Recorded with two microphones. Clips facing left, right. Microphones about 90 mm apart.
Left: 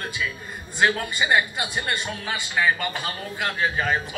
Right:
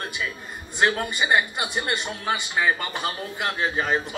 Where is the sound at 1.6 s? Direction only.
20° right (ahead or behind).